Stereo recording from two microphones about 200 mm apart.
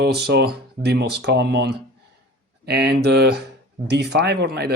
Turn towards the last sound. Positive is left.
turn(degrees=-50)  # may be behind; listen again after turning